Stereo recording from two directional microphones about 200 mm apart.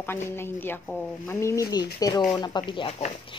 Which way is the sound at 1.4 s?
15° left (ahead or behind).